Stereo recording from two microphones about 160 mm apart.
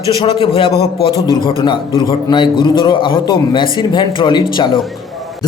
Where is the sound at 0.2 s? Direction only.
35° left (ahead or behind).